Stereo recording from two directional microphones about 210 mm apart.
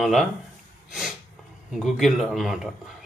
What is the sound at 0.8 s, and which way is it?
Snort, centre (ahead or behind).